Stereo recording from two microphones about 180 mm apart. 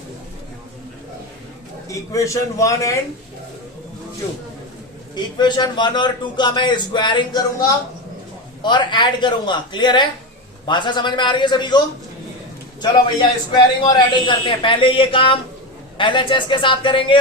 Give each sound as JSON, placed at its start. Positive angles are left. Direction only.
{"t": 1.9, "sound": "a man's voice", "side_deg": 15}
{"t": 5.4, "sound": "a man's voice", "side_deg": 25}
{"t": 8.6, "sound": "a man's voice", "side_deg": 25}
{"t": 12.8, "sound": "a man's voice", "side_deg": 25}